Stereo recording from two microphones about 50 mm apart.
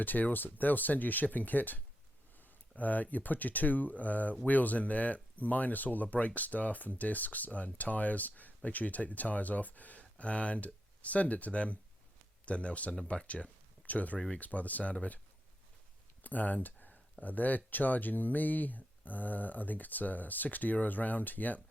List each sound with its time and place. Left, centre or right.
0.0 s speech: left
16.2 s a sound: left
17.2 s speech: left